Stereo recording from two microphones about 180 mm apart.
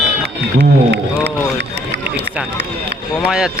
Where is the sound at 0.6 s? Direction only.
70° right (ahead or behind).